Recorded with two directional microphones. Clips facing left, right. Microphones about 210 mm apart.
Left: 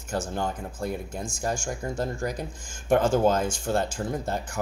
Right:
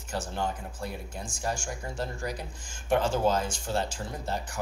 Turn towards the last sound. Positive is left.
turn(degrees=50)  # may be behind; listen again after turning